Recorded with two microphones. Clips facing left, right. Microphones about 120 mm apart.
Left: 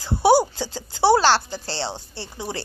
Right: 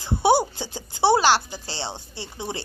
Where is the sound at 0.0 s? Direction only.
20° right (ahead or behind).